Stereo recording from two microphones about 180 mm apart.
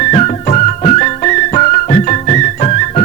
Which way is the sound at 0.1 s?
40° left (ahead or behind).